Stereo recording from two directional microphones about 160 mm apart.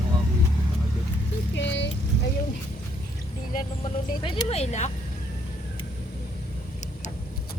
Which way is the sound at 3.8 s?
30° left (ahead or behind).